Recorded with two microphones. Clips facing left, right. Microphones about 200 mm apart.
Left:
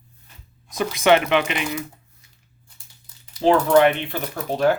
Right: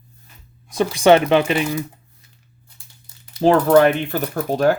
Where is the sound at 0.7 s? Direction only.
30° right (ahead or behind).